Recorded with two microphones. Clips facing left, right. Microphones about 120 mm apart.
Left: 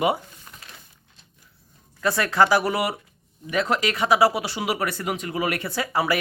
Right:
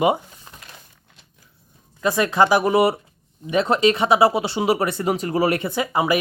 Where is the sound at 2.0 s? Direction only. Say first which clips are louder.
Right 2 dB; 20° right (ahead or behind); by 5.5 s 35° right (ahead or behind).